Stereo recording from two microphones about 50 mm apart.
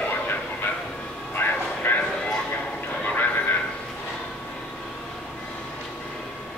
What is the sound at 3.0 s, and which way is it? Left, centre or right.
Horse, left.